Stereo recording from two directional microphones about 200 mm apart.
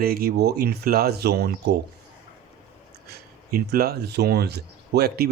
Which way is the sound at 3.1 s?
50° right (ahead or behind).